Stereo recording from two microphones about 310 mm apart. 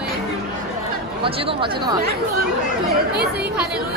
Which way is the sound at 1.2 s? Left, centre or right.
Centre.